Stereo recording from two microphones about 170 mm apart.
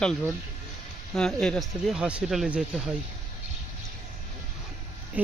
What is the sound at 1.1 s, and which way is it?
Speech, 5° left (ahead or behind).